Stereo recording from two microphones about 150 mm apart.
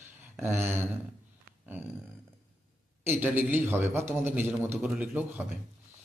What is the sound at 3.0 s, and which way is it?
A man's voice, 15° right (ahead or behind).